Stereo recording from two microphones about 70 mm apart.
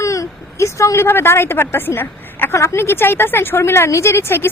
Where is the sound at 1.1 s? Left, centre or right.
Left.